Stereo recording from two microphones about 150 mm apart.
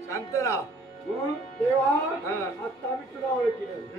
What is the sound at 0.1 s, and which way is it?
Speech, 20° left (ahead or behind).